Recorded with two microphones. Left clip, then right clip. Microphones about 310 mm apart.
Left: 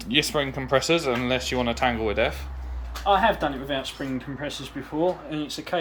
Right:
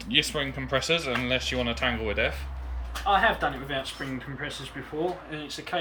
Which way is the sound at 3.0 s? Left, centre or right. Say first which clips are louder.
Left 2 dB; left.